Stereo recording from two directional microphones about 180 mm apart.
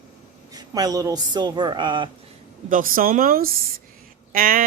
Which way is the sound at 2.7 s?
50° right (ahead or behind).